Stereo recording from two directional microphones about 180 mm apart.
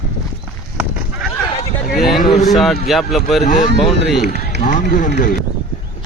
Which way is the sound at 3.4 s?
45° left (ahead or behind).